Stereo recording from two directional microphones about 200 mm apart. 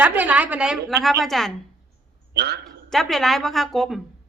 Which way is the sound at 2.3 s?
55° right (ahead or behind).